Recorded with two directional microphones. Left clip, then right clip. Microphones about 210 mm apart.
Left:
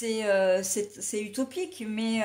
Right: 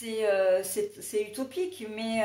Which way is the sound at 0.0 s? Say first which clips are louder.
Left 1 dB; 50° left (ahead or behind).